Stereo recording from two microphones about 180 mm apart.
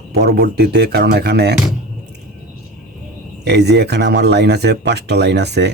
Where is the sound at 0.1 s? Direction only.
65° right (ahead or behind).